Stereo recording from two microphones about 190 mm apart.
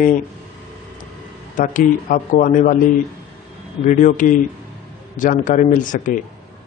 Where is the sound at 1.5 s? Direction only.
45° left (ahead or behind).